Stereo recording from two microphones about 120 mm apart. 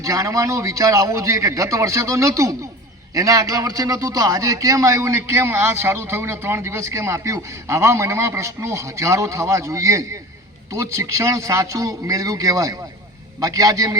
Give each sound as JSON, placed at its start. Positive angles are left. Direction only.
{"t": 0.0, "sound": "a man's voice", "side_deg": -25}